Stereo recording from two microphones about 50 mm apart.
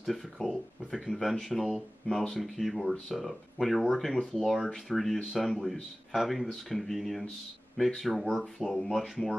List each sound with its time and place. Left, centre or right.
0.0 s speech: centre